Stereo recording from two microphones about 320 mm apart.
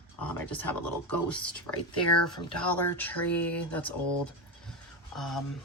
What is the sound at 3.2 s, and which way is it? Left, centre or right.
Speech, left.